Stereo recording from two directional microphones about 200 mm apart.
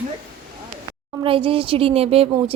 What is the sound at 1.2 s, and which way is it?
A woman's voice, 25° right (ahead or behind).